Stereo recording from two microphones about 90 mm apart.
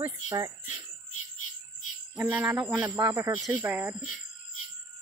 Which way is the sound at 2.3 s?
20° right (ahead or behind).